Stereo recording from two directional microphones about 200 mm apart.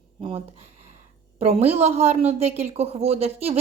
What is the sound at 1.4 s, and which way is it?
Speech, 30° right (ahead or behind).